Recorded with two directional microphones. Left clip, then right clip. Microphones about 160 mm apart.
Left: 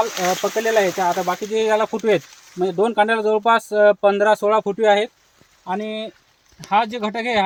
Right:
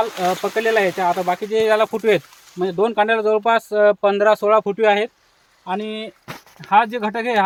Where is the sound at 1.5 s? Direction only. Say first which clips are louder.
Right 2 dB; 45° left (ahead or behind).